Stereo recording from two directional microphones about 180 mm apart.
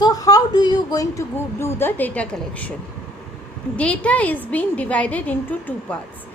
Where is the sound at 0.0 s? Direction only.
20° left (ahead or behind).